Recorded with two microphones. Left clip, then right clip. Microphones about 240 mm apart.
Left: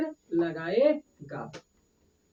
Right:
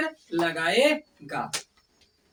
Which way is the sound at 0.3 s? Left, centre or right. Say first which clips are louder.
Right 4 dB; left.